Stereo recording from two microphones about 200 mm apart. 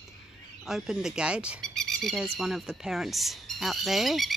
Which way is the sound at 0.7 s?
Centre (ahead or behind).